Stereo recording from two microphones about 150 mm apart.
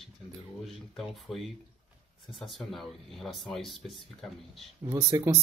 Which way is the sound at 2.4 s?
Centre (ahead or behind).